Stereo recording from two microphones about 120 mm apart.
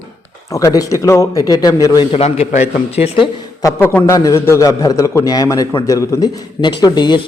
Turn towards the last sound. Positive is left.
turn(degrees=35)  # may be behind; listen again after turning